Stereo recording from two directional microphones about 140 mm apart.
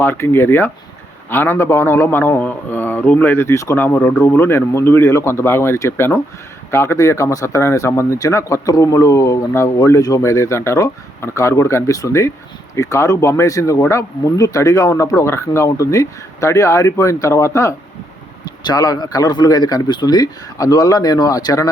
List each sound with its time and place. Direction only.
0.0 s a man's voice: 15° left (ahead or behind)